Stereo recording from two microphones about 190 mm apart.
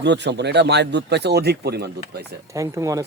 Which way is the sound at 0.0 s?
65° right (ahead or behind).